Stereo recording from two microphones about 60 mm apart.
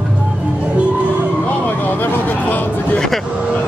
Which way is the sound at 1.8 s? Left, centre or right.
Left.